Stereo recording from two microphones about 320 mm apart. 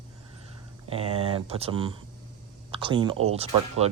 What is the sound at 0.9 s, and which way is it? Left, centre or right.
Speech, centre.